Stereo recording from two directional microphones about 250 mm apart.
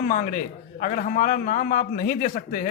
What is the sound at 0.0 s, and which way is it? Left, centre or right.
A man's voice, left.